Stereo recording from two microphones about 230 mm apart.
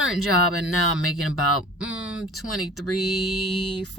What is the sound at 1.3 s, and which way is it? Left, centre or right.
Speech, centre.